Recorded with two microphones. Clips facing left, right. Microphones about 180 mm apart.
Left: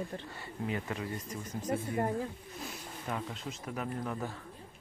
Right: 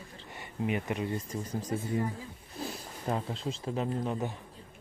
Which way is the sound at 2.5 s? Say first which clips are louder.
Right 4 dB; 35° right (ahead or behind).